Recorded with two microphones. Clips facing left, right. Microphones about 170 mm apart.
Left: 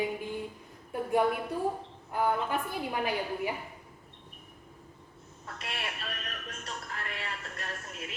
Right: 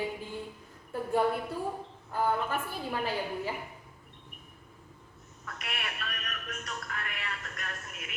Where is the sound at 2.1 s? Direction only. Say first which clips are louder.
Left 1 dB; 15° left (ahead or behind).